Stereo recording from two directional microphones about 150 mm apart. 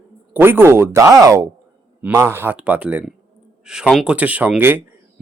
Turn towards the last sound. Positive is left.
turn(degrees=-10)  # may be behind; listen again after turning